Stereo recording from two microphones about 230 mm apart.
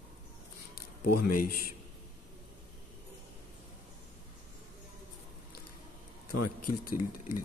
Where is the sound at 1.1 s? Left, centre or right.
Left.